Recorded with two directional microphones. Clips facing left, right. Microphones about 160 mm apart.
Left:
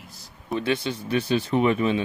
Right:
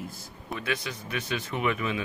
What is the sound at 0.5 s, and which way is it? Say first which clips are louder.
Speech: left 8 dB; 30° left (ahead or behind).